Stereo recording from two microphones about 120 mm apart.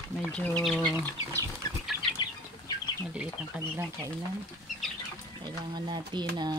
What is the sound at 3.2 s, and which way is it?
Speech, 15° right (ahead or behind).